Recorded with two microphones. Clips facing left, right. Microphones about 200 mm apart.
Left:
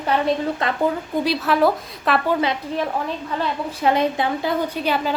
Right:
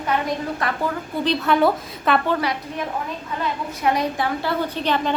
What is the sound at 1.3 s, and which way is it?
Speech, centre (ahead or behind).